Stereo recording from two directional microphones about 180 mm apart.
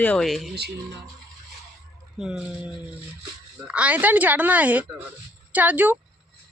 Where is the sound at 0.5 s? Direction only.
65° right (ahead or behind).